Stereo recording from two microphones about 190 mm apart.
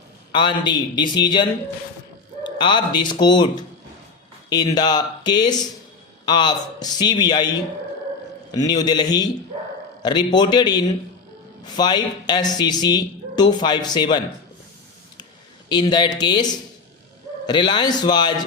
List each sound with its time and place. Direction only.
0.3 s speech: 25° left (ahead or behind)
8.5 s speech: 20° left (ahead or behind)
15.7 s speech: 25° left (ahead or behind)